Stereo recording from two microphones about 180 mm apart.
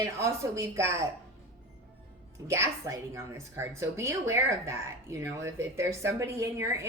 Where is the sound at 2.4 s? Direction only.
15° right (ahead or behind).